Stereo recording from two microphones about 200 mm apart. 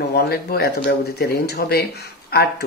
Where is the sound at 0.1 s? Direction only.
50° left (ahead or behind).